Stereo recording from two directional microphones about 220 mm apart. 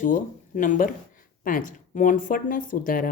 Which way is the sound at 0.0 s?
35° left (ahead or behind).